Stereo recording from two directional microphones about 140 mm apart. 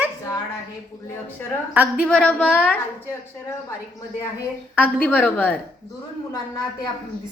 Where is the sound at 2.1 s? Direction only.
5° left (ahead or behind).